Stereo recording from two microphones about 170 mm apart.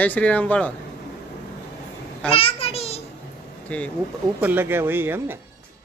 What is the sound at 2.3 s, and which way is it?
Speech, 35° left (ahead or behind).